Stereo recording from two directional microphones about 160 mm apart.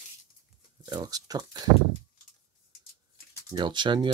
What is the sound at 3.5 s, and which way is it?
Speech, 30° right (ahead or behind).